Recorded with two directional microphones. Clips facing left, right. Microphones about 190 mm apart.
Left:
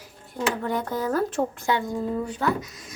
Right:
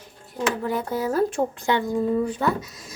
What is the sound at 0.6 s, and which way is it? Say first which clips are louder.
Speech: right 1 dB; 5° right (ahead or behind).